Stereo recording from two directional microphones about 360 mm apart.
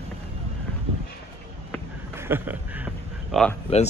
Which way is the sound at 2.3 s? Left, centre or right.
Centre.